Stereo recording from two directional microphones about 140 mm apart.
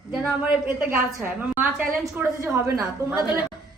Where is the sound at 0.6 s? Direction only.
15° right (ahead or behind).